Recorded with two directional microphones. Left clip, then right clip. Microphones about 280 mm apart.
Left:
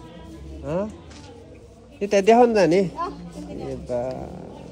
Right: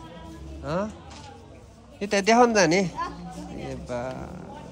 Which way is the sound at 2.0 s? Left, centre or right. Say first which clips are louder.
Left 4 dB; centre.